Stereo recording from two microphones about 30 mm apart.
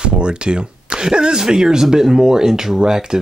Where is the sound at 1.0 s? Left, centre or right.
Right.